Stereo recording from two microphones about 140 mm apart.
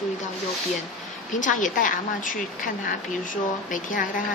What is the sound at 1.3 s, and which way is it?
Speech, 65° left (ahead or behind).